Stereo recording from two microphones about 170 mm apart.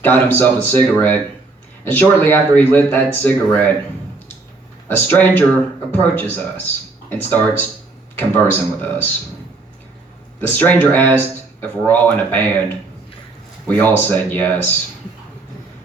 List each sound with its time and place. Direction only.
0.0 s speech: 10° left (ahead or behind)
1.8 s speech: 10° left (ahead or behind)
4.9 s speech: 10° left (ahead or behind)
10.4 s speech: 10° left (ahead or behind)
13.7 s speech: 10° left (ahead or behind)